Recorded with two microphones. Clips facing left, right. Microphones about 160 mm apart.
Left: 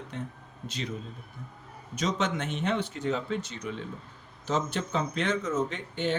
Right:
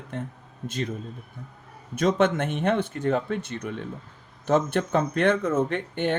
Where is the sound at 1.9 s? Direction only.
55° right (ahead or behind).